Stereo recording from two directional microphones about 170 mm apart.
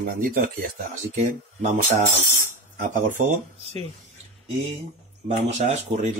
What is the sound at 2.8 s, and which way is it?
Speech, 50° right (ahead or behind).